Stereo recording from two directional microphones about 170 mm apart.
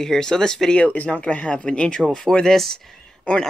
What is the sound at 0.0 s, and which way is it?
Speech, 5° left (ahead or behind).